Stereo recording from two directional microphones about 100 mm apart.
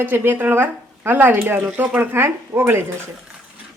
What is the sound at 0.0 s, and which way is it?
A woman's voice, 20° right (ahead or behind).